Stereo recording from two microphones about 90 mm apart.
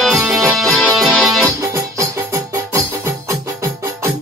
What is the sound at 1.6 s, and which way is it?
Music, 35° right (ahead or behind).